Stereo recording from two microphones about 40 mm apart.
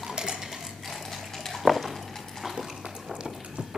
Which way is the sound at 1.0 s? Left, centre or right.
Centre.